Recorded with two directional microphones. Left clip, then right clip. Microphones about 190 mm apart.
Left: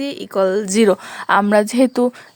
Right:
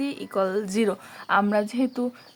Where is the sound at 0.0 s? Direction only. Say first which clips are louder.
Left 8 dB; 40° left (ahead or behind).